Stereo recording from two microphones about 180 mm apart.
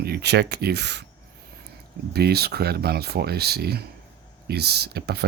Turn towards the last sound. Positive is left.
turn(degrees=-65)  # may be behind; listen again after turning